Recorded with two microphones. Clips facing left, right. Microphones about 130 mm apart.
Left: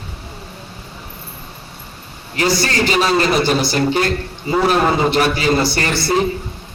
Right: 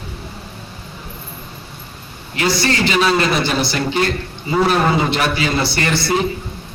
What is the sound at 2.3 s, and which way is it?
A man's voice, 40° left (ahead or behind).